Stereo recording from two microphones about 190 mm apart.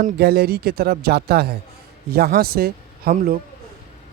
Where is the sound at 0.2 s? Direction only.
55° right (ahead or behind).